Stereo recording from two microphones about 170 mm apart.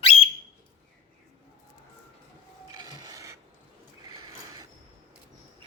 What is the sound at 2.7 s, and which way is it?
Filing, 25° right (ahead or behind).